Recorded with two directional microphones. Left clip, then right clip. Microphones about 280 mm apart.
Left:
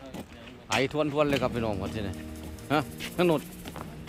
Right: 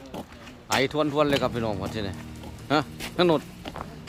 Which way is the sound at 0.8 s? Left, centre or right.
Centre.